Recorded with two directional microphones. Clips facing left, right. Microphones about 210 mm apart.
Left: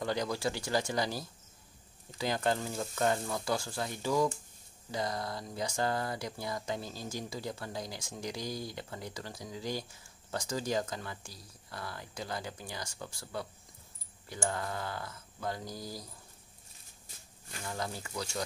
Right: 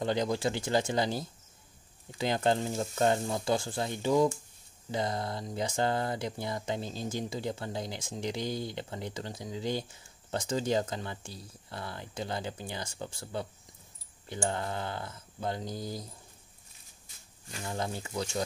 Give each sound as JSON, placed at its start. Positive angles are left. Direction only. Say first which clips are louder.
{"t": 0.0, "sound": "speech", "louder": "right 4 dB", "side_deg": -25}
{"t": 17.6, "sound": "speech", "louder": "right 3 dB", "side_deg": -25}